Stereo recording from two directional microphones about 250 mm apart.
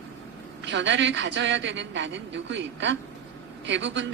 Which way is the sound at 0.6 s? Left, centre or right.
Right.